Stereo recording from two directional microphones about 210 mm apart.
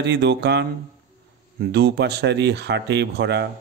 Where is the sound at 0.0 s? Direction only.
55° right (ahead or behind).